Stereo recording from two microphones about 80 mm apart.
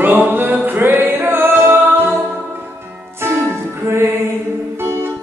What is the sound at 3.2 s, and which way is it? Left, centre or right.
Music, right.